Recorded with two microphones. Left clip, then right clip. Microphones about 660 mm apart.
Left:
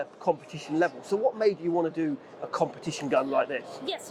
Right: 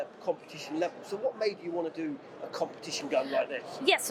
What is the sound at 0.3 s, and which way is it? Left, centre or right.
Speech, left.